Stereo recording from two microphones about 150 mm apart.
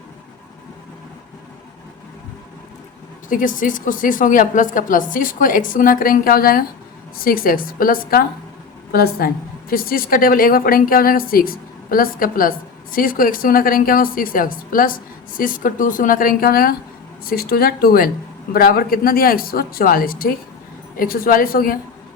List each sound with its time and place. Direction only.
3.2 s a woman's voice: 60° left (ahead or behind)
8.9 s a woman's voice: 90° left; by 21.8 s 75° left (ahead or behind)